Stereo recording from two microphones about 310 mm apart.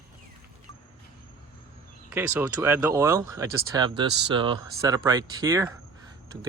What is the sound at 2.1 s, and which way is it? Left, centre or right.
Speech, centre.